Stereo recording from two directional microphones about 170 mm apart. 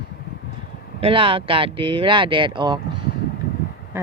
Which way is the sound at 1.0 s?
30° right (ahead or behind).